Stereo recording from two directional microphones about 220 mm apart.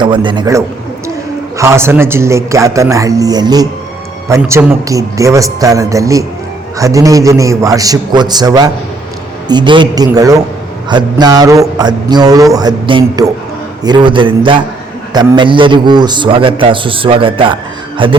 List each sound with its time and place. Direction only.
0.0 s a man's voice: 20° right (ahead or behind)